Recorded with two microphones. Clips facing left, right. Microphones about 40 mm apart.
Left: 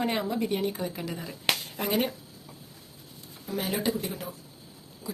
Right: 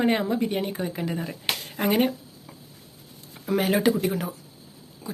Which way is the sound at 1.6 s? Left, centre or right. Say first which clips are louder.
Right 5 dB; right.